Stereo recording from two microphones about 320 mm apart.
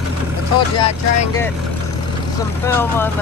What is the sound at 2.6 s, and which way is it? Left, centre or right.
Speech, centre.